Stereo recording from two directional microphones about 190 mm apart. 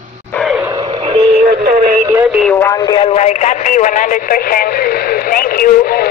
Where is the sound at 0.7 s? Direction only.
25° right (ahead or behind).